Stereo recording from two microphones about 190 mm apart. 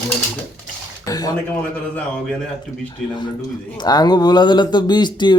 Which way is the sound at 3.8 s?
20° left (ahead or behind).